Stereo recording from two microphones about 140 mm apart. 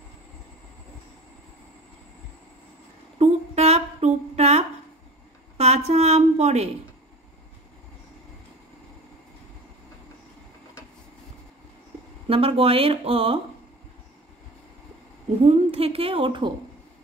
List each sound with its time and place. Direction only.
3.2 s a sound: 50° right (ahead or behind)
5.6 s a woman's voice: 50° right (ahead or behind)
12.3 s a woman's voice: 40° right (ahead or behind)
15.4 s a woman's voice: 45° right (ahead or behind)